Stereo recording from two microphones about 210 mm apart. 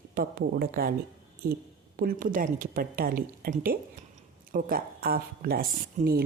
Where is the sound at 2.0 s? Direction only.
40° right (ahead or behind).